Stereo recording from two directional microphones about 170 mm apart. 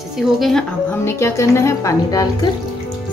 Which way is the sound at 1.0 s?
15° left (ahead or behind).